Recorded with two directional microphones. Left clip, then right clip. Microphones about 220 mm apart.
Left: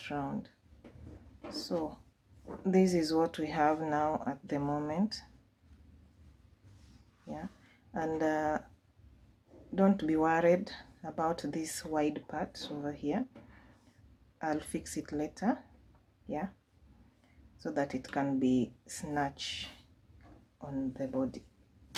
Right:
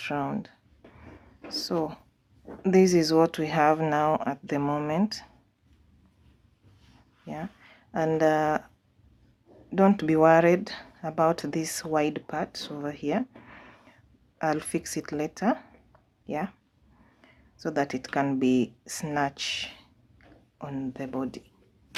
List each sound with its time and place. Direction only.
0.0 s speech: 40° right (ahead or behind)
1.5 s speech: 40° right (ahead or behind)
7.9 s speech: 35° right (ahead or behind)
9.7 s speech: 35° right (ahead or behind)
17.2 s speech: 35° right (ahead or behind)